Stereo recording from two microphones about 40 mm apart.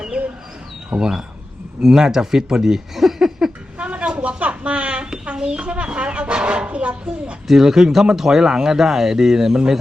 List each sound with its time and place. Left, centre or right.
0.1 s bird: right
0.9 s speech: centre
3.8 s a sound: right
5.2 s speech: right
7.4 s speech: centre